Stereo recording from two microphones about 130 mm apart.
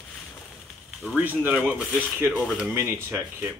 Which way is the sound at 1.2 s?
15° right (ahead or behind).